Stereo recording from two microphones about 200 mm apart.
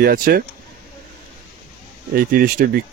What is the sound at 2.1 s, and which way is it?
Speech, 50° right (ahead or behind).